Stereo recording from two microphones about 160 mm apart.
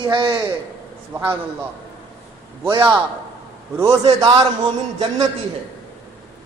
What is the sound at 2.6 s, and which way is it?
A man's voice, 30° right (ahead or behind).